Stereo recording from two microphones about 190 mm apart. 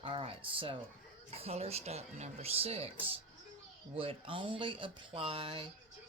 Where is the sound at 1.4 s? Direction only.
35° right (ahead or behind).